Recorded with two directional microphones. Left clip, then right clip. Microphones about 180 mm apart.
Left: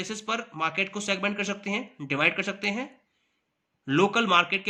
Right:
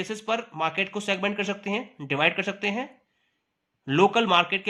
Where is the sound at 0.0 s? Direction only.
45° right (ahead or behind).